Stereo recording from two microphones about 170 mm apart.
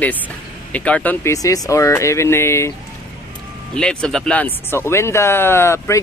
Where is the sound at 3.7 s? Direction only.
5° left (ahead or behind).